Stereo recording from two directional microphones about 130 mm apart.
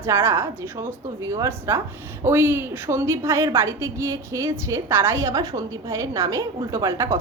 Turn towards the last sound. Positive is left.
turn(degrees=-25)  # may be behind; listen again after turning